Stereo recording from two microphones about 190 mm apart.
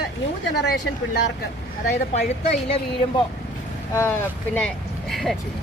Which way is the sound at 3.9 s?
10° left (ahead or behind).